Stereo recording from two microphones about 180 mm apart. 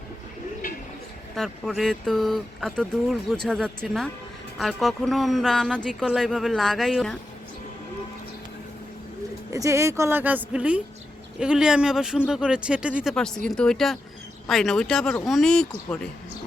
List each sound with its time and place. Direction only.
1.4 s speech: centre (ahead or behind)
9.5 s a woman's voice: 15° right (ahead or behind); by 16.0 s 5° left (ahead or behind)